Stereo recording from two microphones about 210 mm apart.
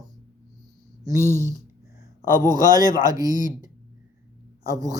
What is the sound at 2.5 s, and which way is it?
Speech, 20° right (ahead or behind).